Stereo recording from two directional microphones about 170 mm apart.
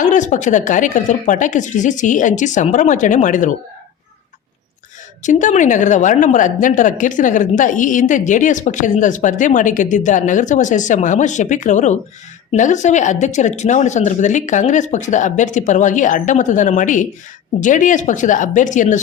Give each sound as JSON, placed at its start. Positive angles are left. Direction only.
{"t": 0.0, "sound": "a woman's voice", "side_deg": 45}
{"t": 5.2, "sound": "a woman's voice", "side_deg": 45}